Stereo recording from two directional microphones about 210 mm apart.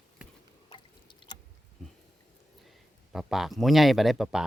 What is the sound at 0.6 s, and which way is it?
Drip, 20° left (ahead or behind).